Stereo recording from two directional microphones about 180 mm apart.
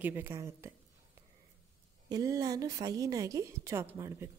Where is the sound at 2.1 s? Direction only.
20° right (ahead or behind).